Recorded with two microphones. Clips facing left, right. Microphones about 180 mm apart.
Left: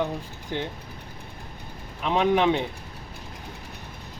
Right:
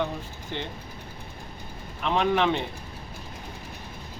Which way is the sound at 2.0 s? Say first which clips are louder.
Left 2 dB; 10° left (ahead or behind).